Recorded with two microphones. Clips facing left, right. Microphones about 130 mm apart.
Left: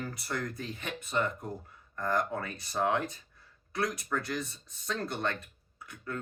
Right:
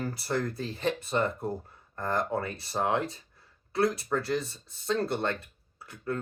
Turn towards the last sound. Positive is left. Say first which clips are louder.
# right 6 dB
turn(degrees=-30)  # may be behind; listen again after turning